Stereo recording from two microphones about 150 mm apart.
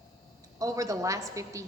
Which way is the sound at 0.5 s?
20° right (ahead or behind).